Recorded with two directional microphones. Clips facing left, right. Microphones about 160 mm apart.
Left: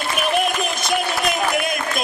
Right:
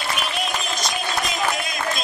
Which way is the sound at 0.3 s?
55° left (ahead or behind).